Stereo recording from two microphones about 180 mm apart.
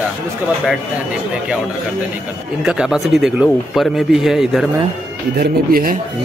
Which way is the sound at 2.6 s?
5° right (ahead or behind).